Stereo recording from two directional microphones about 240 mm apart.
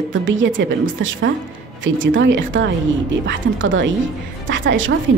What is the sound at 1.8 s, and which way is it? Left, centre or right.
A woman's voice, right.